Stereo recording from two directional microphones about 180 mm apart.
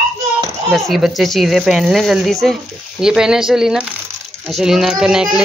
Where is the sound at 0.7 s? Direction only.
Centre (ahead or behind).